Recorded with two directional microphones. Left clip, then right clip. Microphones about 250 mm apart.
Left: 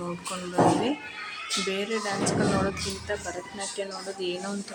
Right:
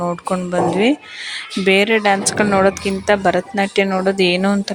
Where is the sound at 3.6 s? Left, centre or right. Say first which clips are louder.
Right 16 dB; right.